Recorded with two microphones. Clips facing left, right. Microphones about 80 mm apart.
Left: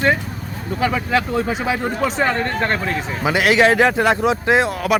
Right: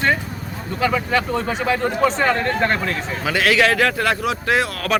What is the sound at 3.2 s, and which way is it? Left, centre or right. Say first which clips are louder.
Speech: left 3 dB; left.